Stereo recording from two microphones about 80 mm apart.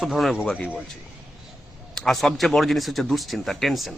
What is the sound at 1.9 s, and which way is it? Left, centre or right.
Speech, centre.